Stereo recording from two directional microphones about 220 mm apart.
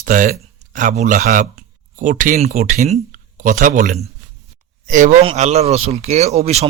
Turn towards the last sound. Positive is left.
turn(degrees=-30)  # may be behind; listen again after turning